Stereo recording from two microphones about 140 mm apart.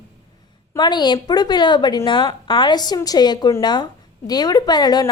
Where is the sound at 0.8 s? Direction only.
30° left (ahead or behind).